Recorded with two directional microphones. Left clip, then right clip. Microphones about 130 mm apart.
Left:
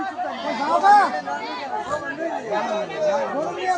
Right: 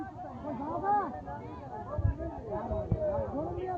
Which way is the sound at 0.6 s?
30° left (ahead or behind).